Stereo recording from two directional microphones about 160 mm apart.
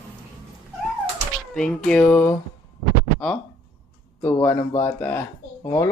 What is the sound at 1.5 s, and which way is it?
Speech, 5° left (ahead or behind).